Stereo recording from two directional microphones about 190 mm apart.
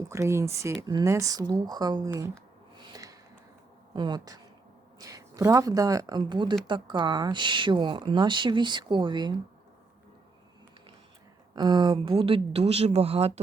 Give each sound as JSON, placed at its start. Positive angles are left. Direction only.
{"t": 0.1, "sound": "speech", "side_deg": -15}
{"t": 2.7, "sound": "snort", "side_deg": -20}
{"t": 3.9, "sound": "speech", "side_deg": -20}
{"t": 11.5, "sound": "speech", "side_deg": -25}